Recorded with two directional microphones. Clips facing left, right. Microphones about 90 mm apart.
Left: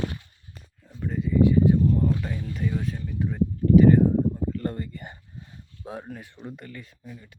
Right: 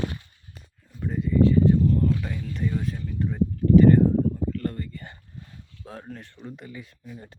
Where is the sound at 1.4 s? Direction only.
15° left (ahead or behind).